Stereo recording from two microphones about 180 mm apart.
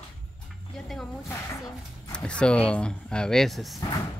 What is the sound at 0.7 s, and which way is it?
Speech, 5° left (ahead or behind).